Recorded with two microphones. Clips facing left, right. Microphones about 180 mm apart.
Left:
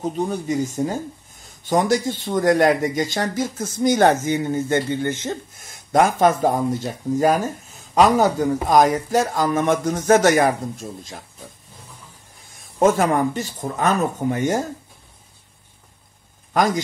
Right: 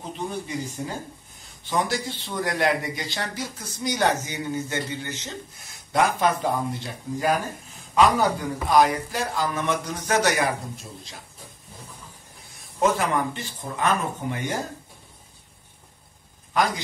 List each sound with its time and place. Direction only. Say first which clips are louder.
0.0 s speech: left 8 dB; 45° left (ahead or behind)
12.7 s speech: left 6 dB; 45° left (ahead or behind)
16.5 s speech: left 5 dB; 45° left (ahead or behind)